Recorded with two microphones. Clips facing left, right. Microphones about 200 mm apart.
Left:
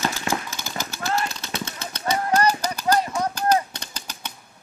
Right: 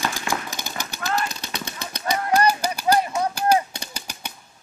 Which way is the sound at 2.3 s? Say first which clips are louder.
Right 2 dB; 10° right (ahead or behind).